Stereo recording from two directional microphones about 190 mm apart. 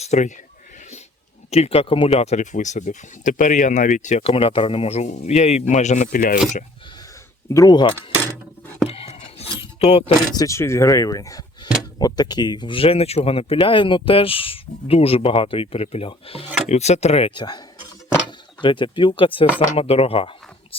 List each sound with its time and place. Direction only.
0.0 s speech: 40° left (ahead or behind)
1.5 s speech: 35° left (ahead or behind)
7.5 s speech: 20° left (ahead or behind)
8.9 s a sound: 35° left (ahead or behind)
10.3 s speech: 15° left (ahead or behind)